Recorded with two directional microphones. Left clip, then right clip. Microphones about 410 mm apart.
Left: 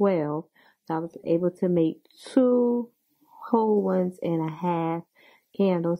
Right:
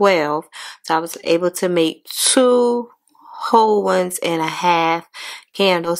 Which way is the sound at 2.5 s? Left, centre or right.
Centre.